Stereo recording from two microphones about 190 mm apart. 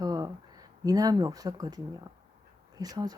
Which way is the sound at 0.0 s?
20° right (ahead or behind).